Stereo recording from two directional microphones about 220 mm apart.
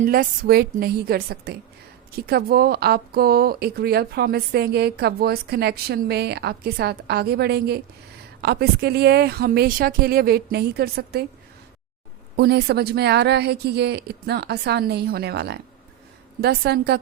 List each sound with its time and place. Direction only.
0.1 s speech: 45° right (ahead or behind)
12.4 s speech: 50° right (ahead or behind)